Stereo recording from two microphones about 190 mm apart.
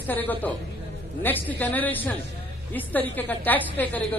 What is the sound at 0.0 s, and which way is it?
A man's voice, 10° left (ahead or behind).